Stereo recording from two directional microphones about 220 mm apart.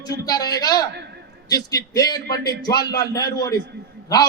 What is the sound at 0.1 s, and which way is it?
A man's voice, 15° left (ahead or behind).